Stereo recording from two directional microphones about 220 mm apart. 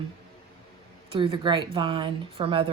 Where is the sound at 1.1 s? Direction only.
20° right (ahead or behind).